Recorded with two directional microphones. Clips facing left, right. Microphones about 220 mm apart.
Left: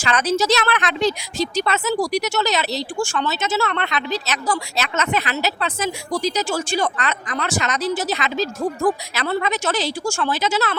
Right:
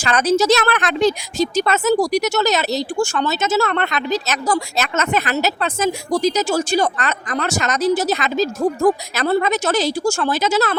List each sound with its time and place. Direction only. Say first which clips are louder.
0.0 s a woman's voice: right 4 dB; 45° right (ahead or behind)